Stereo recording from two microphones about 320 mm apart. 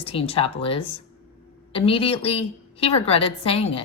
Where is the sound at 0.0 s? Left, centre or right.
Centre.